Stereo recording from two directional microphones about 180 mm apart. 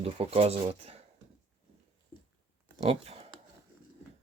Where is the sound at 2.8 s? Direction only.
35° right (ahead or behind).